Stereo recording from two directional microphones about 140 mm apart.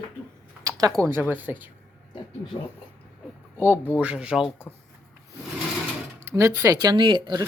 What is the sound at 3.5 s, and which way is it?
Speech, 15° right (ahead or behind).